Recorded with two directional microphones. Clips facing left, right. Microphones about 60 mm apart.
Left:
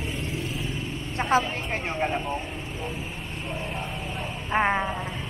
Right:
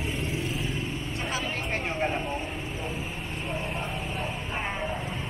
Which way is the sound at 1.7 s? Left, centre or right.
Centre.